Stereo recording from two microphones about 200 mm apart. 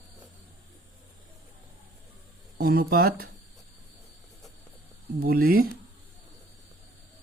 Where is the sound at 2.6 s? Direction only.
50° right (ahead or behind).